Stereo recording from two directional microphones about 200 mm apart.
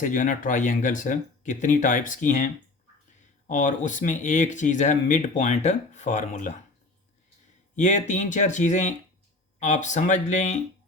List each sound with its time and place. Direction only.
0.0 s speech: 40° left (ahead or behind)
7.8 s speech: 35° left (ahead or behind)